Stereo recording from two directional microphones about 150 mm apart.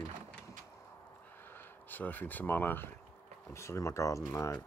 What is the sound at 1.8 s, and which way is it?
Speech, 10° left (ahead or behind).